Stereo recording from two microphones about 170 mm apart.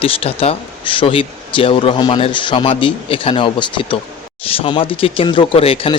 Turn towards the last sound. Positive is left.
turn(degrees=35)  # may be behind; listen again after turning